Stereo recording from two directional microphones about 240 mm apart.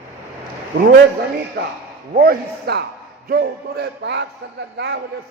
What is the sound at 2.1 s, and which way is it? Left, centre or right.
A man's voice, right.